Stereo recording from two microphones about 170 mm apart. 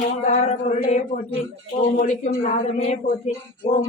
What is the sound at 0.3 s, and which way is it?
Speech, 45° left (ahead or behind).